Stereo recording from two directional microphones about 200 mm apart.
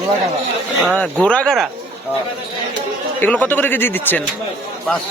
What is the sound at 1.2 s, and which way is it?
Speech, 5° left (ahead or behind).